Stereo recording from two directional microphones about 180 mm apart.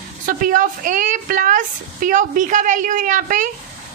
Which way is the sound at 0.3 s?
50° right (ahead or behind).